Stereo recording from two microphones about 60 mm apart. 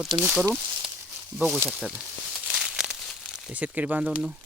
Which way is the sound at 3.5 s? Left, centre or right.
Right.